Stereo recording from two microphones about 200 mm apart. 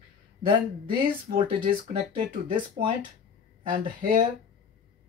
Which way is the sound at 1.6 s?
25° right (ahead or behind).